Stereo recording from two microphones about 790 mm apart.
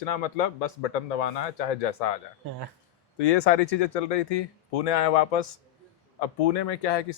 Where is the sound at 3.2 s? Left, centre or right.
Left.